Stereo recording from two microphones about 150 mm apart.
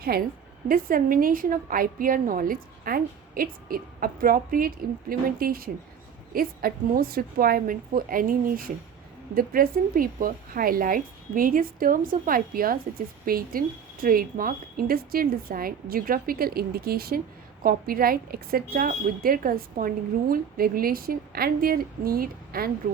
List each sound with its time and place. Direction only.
0.7 s speech: 70° right (ahead or behind); by 17.2 s 90° right
17.6 s speech: 75° right (ahead or behind)